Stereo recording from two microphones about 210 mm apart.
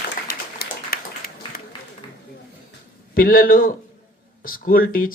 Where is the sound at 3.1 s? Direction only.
45° left (ahead or behind).